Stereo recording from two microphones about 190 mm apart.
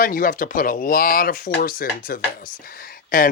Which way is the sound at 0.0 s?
45° left (ahead or behind).